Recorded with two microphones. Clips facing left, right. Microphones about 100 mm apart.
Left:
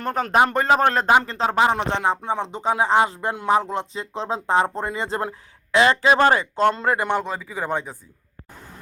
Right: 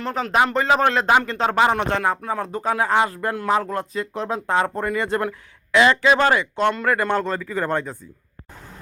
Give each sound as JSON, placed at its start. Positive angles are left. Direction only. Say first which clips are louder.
{"t": 0.0, "sound": "speech", "louder": "left 1 dB", "side_deg": 50}